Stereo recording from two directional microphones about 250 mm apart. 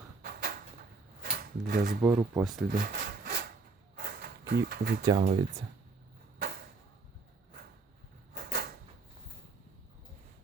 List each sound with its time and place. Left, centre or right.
0.2 s cupboard open or close: right
1.2 s drawer open or close: right
2.0 s speech: centre
2.7 s wood: right
3.9 s a sound: right
5.0 s speech: right
8.4 s a sound: right